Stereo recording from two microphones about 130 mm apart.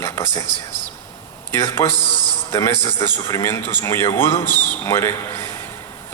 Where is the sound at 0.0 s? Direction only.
20° left (ahead or behind).